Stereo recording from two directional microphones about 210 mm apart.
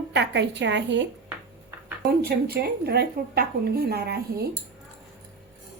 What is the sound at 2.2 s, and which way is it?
A woman's voice, 50° right (ahead or behind).